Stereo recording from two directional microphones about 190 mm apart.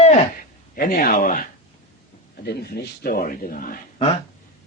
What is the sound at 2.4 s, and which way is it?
A man's voice, 55° left (ahead or behind).